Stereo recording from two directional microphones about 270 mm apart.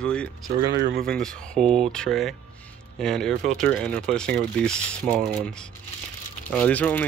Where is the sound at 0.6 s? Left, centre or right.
Right.